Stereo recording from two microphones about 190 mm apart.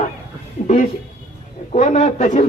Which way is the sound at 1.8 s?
40° left (ahead or behind).